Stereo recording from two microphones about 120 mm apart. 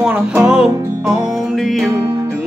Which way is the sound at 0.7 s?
30° right (ahead or behind).